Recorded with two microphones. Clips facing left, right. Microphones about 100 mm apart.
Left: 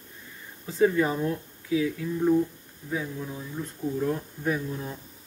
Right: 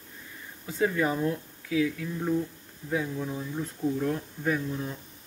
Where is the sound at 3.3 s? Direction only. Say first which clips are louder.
Right 2 dB; 15° right (ahead or behind).